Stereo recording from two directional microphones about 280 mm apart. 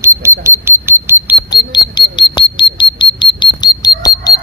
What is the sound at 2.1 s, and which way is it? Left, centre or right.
Squawk, centre.